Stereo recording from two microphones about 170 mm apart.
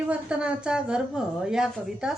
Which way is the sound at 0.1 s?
5° right (ahead or behind).